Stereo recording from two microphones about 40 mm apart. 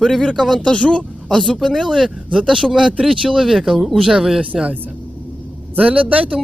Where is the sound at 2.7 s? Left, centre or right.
Centre.